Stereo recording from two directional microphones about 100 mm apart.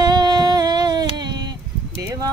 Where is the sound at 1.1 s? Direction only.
45° right (ahead or behind).